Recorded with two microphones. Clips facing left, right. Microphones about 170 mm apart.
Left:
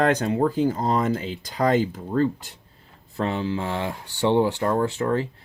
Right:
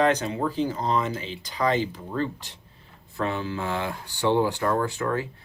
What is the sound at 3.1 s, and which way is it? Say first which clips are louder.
Speech: left 3 dB; 30° left (ahead or behind).